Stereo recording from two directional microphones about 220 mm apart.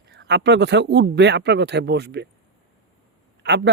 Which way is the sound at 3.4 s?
50° right (ahead or behind).